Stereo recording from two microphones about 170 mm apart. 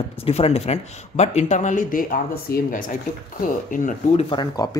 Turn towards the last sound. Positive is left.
turn(degrees=20)  # may be behind; listen again after turning